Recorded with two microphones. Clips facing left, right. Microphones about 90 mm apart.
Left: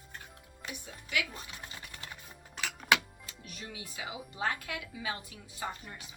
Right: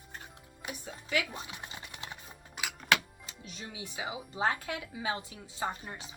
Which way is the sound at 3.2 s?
20° right (ahead or behind).